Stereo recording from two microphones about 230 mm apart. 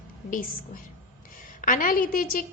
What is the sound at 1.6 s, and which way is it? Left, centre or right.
Speech, left.